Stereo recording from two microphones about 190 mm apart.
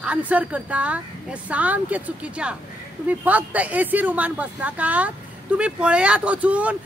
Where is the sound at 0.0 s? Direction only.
5° right (ahead or behind).